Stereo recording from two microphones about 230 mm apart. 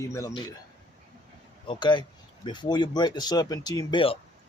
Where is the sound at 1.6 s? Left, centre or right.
Centre.